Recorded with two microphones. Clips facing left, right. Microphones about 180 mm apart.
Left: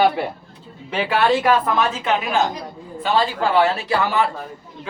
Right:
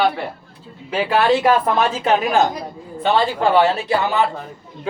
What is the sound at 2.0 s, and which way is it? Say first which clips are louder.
Speech: right 4 dB; 40° right (ahead or behind).